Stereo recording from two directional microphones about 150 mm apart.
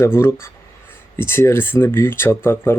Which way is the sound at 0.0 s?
15° left (ahead or behind).